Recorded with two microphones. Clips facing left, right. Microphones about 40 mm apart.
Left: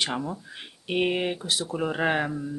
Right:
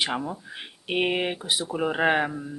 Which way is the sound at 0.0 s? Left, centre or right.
Centre.